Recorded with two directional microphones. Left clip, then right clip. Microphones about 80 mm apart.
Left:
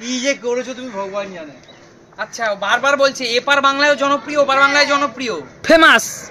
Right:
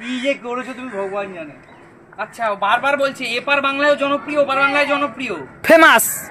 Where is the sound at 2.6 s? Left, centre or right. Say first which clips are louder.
Left 2 dB; left.